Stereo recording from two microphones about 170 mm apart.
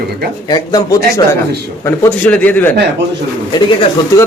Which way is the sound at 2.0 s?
10° left (ahead or behind).